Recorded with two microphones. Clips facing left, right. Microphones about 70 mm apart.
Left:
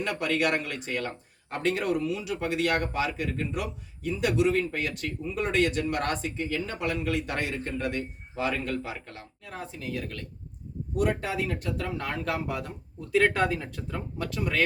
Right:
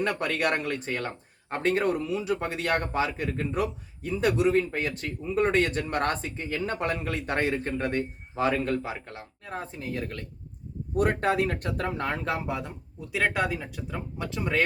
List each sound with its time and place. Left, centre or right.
0.0 s speech: right
10.9 s speech: right; by 14.0 s centre
14.2 s speech: right